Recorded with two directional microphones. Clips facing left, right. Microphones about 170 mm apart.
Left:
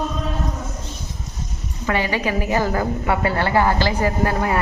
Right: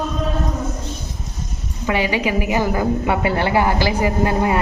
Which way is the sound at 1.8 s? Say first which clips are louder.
Right 2 dB; 15° right (ahead or behind).